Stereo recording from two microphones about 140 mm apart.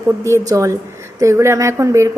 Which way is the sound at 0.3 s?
20° right (ahead or behind).